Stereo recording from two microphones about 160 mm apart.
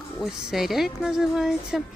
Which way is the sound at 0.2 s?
Centre (ahead or behind).